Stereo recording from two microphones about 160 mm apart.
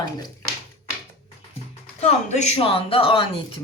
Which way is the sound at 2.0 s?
45° left (ahead or behind).